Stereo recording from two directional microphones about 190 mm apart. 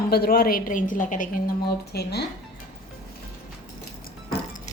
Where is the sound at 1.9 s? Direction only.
60° left (ahead or behind).